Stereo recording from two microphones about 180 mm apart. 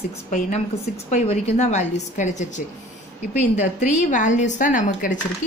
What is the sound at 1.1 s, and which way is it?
A woman's voice, 40° left (ahead or behind).